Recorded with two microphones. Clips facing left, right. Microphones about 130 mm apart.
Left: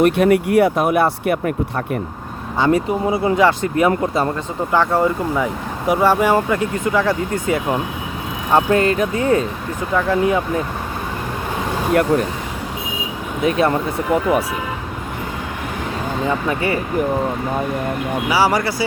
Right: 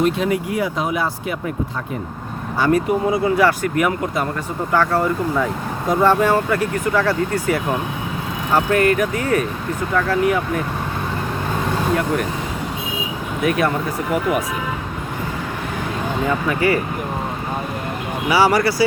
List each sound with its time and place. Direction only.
0.0 s speech: 60° left (ahead or behind)
2.6 s speech: 25° left (ahead or behind)
4.7 s speech: 15° left (ahead or behind)
12.1 s speech: 35° left (ahead or behind)
13.4 s speech: 25° left (ahead or behind)
16.5 s speech: 25° left (ahead or behind)
18.3 s speech: 10° left (ahead or behind)